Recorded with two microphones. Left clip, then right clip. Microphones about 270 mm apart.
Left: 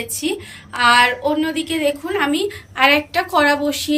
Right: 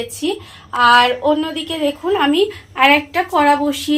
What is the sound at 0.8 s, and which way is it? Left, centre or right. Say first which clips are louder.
A woman's voice: right 2 dB; right.